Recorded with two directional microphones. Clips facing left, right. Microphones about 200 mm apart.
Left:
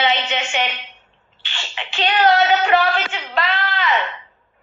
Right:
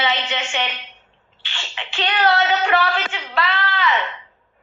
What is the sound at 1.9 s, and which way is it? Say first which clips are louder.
A woman's voice: left 3 dB; 20° left (ahead or behind).